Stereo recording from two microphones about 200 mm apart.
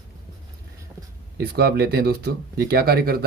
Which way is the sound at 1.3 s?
55° right (ahead or behind).